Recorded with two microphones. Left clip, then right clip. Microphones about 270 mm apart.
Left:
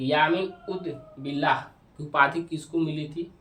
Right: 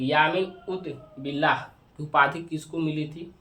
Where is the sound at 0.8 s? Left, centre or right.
Centre.